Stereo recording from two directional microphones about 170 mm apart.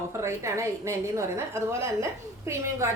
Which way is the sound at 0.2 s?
15° right (ahead or behind).